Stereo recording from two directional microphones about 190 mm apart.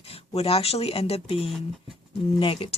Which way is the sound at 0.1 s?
30° left (ahead or behind).